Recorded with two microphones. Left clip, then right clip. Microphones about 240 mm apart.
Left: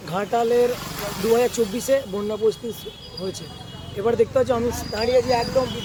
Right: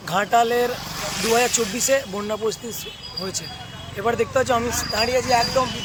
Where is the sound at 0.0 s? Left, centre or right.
Centre.